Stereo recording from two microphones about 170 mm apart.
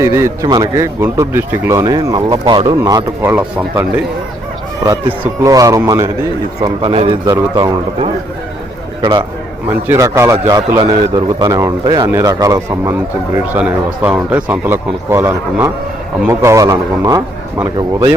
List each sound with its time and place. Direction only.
0.0 s speech: 15° right (ahead or behind)
3.3 s speech: 10° right (ahead or behind)
5.2 s speech: 20° right (ahead or behind)
6.8 s a man's voice: 35° right (ahead or behind)
9.0 s a man's voice: 20° right (ahead or behind)